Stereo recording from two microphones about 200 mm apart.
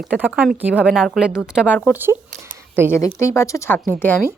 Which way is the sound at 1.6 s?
10° left (ahead or behind).